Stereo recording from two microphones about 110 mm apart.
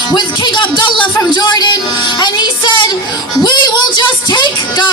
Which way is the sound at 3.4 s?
40° left (ahead or behind).